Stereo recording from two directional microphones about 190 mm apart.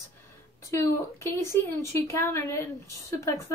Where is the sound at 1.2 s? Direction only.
15° left (ahead or behind).